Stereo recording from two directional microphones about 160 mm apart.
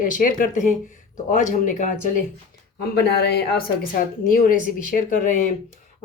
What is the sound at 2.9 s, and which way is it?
Speech, 90° left.